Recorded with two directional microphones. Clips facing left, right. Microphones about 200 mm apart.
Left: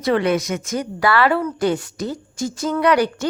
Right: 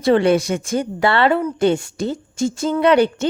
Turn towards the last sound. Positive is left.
turn(degrees=-25)  # may be behind; listen again after turning